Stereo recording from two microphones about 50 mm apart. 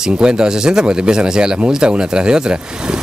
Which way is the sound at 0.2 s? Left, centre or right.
Centre.